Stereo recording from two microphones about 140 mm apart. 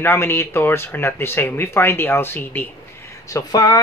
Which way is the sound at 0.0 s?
15° left (ahead or behind).